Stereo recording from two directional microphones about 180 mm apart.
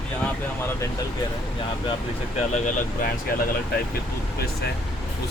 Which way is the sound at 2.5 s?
45° left (ahead or behind).